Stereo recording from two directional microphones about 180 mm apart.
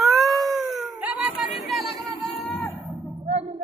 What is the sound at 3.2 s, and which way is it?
Music, 40° right (ahead or behind).